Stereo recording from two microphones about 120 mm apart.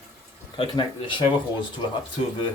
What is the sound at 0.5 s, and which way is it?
Speech, 45° left (ahead or behind).